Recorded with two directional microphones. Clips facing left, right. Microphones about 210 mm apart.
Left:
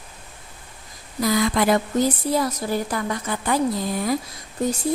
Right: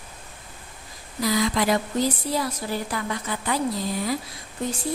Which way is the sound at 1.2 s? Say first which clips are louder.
Left 3 dB; 50° left (ahead or behind).